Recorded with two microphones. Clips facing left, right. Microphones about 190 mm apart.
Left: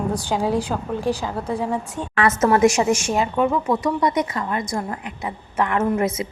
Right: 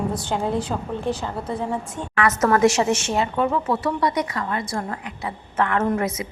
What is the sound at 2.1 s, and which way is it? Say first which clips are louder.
Speech: left 2 dB; 30° left (ahead or behind).